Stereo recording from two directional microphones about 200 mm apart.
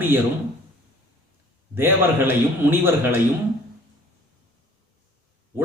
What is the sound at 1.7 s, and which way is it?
A man's voice, 10° right (ahead or behind).